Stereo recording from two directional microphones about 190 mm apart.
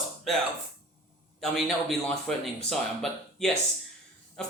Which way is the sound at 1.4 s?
Centre (ahead or behind).